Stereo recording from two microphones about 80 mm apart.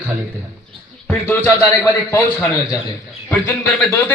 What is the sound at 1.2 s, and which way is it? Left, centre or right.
A man's voice, left.